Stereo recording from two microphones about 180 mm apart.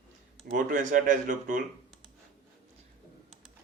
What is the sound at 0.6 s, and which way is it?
Speech, 45° right (ahead or behind).